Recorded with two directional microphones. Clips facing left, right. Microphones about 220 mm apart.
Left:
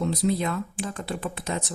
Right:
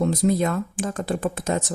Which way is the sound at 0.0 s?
45° right (ahead or behind).